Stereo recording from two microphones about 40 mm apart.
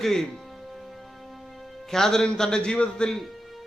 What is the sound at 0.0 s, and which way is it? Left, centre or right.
Speech, centre.